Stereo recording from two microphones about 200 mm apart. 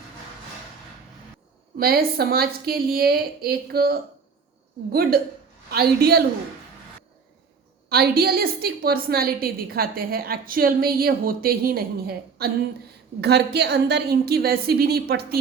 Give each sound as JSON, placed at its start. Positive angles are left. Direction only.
{"t": 1.8, "sound": "a woman's voice", "side_deg": -50}
{"t": 7.9, "sound": "a woman's voice", "side_deg": -50}